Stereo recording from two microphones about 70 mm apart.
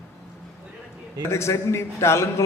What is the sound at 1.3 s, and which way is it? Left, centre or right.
A man's voice, left.